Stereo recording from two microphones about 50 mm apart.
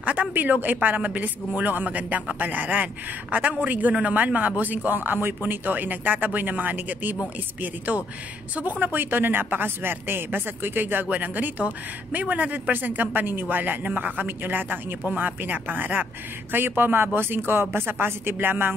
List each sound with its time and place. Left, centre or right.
0.0 s speech: right